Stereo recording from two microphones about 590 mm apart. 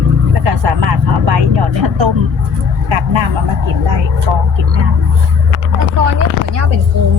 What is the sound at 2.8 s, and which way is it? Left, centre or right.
Speech, right.